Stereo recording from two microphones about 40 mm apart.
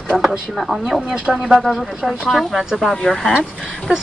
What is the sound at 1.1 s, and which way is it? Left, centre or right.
Speech, right.